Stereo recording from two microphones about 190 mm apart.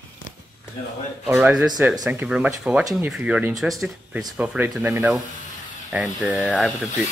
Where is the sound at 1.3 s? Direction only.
10° right (ahead or behind).